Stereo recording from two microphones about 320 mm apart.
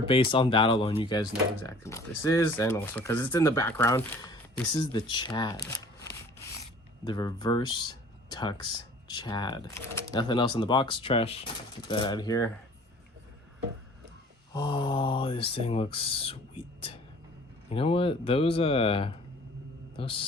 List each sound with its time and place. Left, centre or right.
0.1 s speech: centre
7.0 s speech: centre
14.5 s speech: centre